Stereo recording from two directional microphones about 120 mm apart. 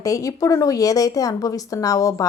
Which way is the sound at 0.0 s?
30° left (ahead or behind).